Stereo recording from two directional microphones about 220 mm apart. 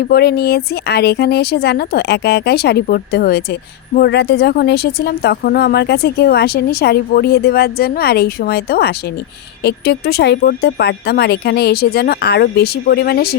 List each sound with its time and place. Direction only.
0.1 s speech: 45° left (ahead or behind)